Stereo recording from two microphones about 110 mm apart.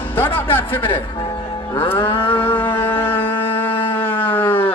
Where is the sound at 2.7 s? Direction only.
20° left (ahead or behind).